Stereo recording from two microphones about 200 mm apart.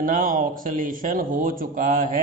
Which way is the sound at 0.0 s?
45° right (ahead or behind).